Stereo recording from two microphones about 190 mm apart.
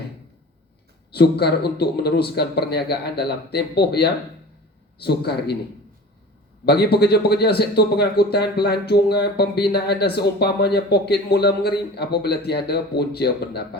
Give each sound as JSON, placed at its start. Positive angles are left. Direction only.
{"t": 1.1, "sound": "speech", "side_deg": 60}
{"t": 6.7, "sound": "speech", "side_deg": 55}